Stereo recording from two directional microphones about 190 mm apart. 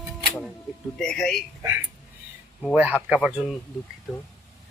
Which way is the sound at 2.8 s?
10° right (ahead or behind).